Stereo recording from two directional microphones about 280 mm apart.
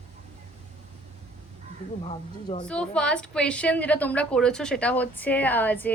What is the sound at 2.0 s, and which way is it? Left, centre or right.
Speech, left.